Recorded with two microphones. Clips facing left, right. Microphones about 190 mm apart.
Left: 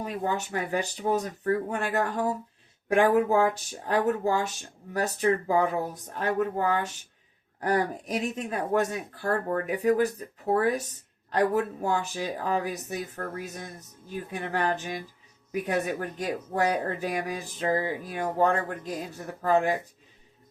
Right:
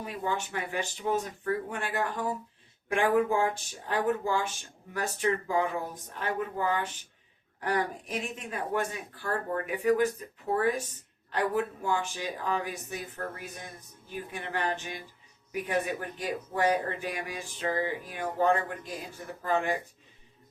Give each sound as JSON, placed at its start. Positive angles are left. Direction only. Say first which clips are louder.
{"t": 0.0, "sound": "speech", "louder": "left 3 dB", "side_deg": 40}